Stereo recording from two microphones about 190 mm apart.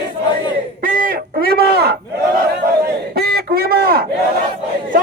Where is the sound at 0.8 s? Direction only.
45° right (ahead or behind).